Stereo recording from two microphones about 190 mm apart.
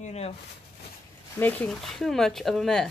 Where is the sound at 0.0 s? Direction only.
35° left (ahead or behind).